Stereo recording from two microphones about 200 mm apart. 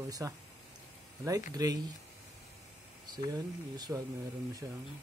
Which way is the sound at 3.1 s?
20° right (ahead or behind).